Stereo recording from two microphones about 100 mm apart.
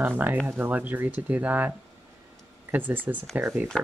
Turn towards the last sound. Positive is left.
turn(degrees=-15)  # may be behind; listen again after turning